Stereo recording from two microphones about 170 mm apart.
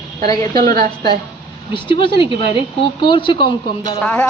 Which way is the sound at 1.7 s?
30° left (ahead or behind).